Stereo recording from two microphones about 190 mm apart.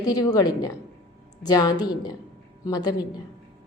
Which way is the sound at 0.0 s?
20° left (ahead or behind).